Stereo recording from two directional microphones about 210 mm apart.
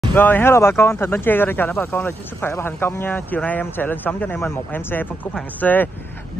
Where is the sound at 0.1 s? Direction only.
10° left (ahead or behind).